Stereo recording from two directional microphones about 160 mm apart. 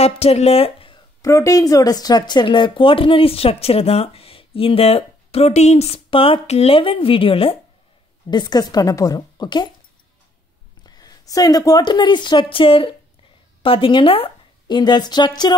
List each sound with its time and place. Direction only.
0.0 s speech: 40° left (ahead or behind)
1.2 s a woman's voice: 20° left (ahead or behind)
10.9 s a woman's voice: 25° left (ahead or behind)